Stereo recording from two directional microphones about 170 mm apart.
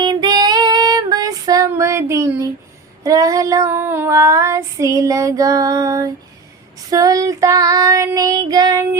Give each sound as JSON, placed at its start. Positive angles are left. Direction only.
{"t": 0.0, "sound": "female singing", "side_deg": -25}
{"t": 3.0, "sound": "child singing", "side_deg": -20}